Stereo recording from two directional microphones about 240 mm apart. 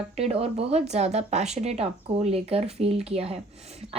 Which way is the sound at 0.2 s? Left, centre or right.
Right.